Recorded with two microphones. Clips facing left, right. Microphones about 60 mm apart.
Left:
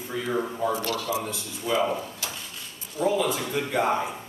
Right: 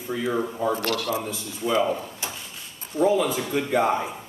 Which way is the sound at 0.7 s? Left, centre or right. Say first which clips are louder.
Right 2 dB; right.